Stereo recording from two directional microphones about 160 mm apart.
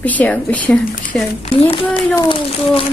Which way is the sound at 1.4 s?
40° left (ahead or behind).